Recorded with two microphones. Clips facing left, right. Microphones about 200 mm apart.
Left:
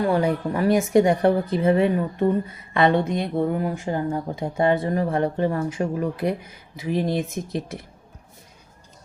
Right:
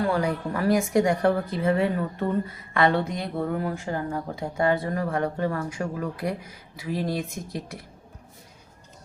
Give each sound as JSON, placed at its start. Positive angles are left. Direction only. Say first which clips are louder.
{"t": 0.0, "sound": "speech", "louder": "left 4 dB", "side_deg": 20}